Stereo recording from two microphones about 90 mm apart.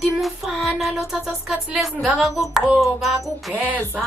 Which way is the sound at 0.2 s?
Centre (ahead or behind).